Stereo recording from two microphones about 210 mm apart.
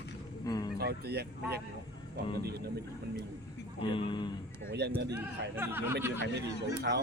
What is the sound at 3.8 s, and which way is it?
Speech, 25° left (ahead or behind).